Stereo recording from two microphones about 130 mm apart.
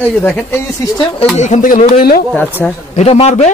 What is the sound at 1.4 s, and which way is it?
Speech, 80° left.